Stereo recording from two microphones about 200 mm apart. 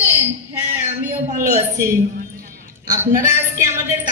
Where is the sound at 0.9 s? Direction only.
35° right (ahead or behind).